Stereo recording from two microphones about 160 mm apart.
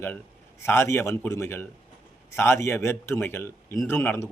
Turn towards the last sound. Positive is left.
turn(degrees=15)  # may be behind; listen again after turning